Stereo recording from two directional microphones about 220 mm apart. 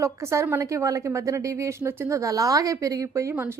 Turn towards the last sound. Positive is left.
turn(degrees=-10)  # may be behind; listen again after turning